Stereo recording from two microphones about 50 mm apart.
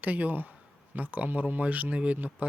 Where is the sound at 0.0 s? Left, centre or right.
Right.